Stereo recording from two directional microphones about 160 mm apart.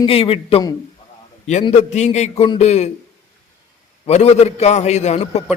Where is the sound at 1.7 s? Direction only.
45° left (ahead or behind).